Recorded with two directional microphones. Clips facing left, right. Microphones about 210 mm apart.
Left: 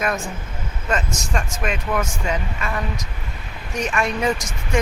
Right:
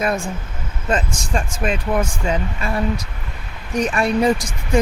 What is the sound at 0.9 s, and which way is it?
Speech, 30° right (ahead or behind).